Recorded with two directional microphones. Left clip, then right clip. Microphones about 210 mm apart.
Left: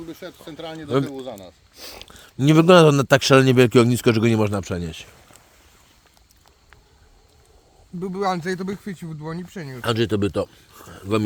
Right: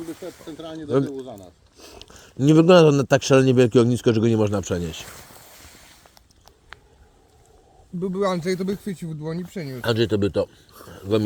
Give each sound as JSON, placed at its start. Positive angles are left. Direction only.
{"t": 0.4, "sound": "a man's voice", "side_deg": 30}
{"t": 1.2, "sound": "speech", "side_deg": 35}
{"t": 2.0, "sound": "a man's voice", "side_deg": 20}
{"t": 8.0, "sound": "speech", "side_deg": 20}